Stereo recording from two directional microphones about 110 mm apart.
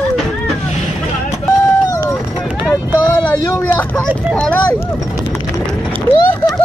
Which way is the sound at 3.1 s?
20° left (ahead or behind).